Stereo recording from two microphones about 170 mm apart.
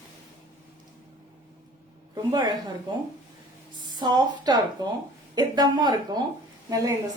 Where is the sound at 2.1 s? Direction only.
25° right (ahead or behind).